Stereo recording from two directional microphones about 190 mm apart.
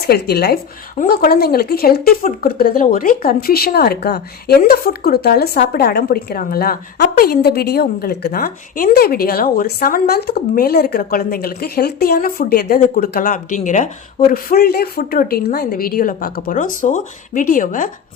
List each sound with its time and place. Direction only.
0.0 s a woman's voice: 55° left (ahead or behind); by 13.9 s 40° left (ahead or behind)
14.3 s a woman's voice: 50° left (ahead or behind)